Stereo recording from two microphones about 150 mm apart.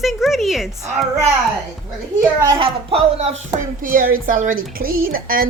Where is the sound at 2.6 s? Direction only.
40° right (ahead or behind).